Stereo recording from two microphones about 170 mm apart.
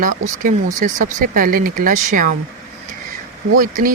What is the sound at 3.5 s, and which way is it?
Speech, 55° right (ahead or behind).